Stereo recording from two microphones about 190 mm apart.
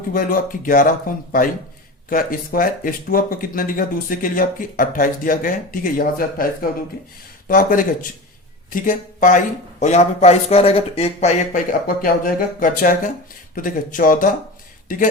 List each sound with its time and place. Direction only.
0.1 s speech: 45° left (ahead or behind)
11.9 s speech: 45° left (ahead or behind)